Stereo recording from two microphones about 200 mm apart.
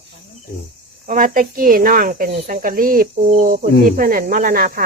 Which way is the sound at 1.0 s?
45° right (ahead or behind).